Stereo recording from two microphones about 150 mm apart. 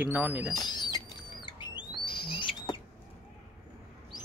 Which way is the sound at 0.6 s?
30° left (ahead or behind).